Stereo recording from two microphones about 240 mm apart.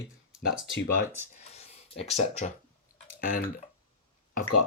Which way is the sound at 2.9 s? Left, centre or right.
Left.